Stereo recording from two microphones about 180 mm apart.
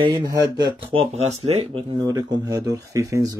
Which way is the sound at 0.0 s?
30° right (ahead or behind).